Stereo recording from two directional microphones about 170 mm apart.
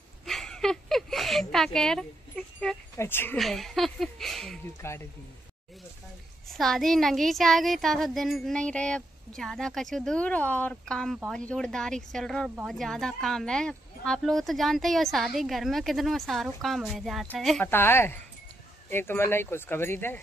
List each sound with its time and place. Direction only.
0.2 s a sound: centre (ahead or behind)
3.0 s speech: 15° left (ahead or behind)
3.3 s speech: centre (ahead or behind)
4.8 s speech: 15° left (ahead or behind)
6.5 s speech: centre (ahead or behind)